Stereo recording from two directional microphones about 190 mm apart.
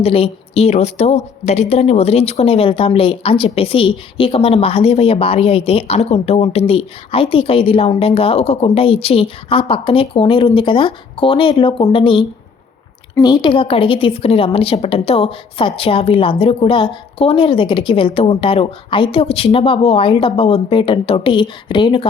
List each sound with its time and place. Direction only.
0.0 s a woman's voice: 30° left (ahead or behind)